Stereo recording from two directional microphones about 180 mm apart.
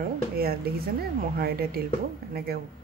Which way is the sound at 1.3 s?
60° right (ahead or behind).